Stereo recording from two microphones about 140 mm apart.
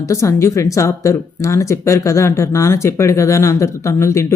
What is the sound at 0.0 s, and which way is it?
Speech, 20° left (ahead or behind).